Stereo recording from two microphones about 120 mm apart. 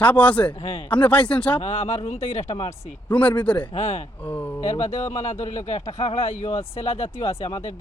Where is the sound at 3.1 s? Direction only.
10° left (ahead or behind).